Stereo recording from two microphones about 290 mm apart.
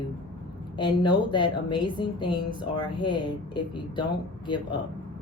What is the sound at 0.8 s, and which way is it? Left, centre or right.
A woman's voice, centre.